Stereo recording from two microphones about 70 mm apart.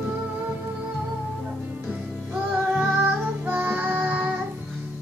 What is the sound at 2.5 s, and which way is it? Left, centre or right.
Child singing, right.